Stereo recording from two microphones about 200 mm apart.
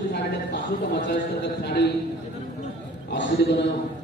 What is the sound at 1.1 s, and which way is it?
Speech, 55° left (ahead or behind).